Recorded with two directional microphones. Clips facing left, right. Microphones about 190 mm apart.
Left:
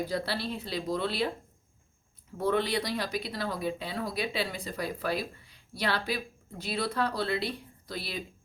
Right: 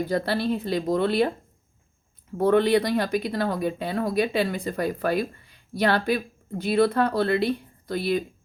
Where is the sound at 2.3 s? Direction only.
55° right (ahead or behind).